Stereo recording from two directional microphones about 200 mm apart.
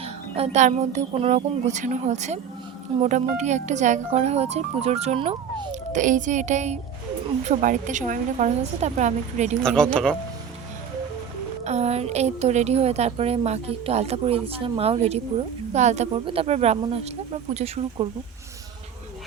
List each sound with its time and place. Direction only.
0.0 s a woman's voice: 30° right (ahead or behind)
6.0 s a woman's voice: 40° right (ahead or behind)
9.6 s speech: 5° left (ahead or behind)
11.6 s a woman's voice: 30° right (ahead or behind)